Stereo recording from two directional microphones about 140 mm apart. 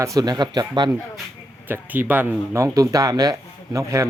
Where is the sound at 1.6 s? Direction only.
15° right (ahead or behind).